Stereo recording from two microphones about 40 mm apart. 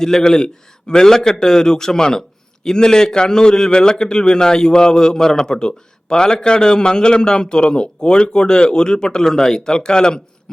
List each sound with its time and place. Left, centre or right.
0.0 s a man's voice: centre